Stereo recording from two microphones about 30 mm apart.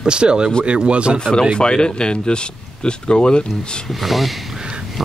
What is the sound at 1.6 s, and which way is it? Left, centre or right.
Speech, left.